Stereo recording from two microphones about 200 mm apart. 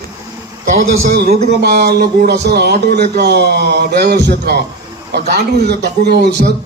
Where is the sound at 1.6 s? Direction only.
55° right (ahead or behind).